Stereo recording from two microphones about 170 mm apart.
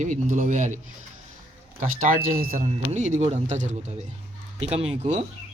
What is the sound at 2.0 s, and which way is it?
Speech, 55° right (ahead or behind).